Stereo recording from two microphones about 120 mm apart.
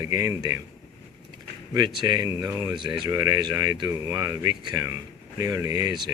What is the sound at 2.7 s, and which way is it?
Speech, 40° right (ahead or behind).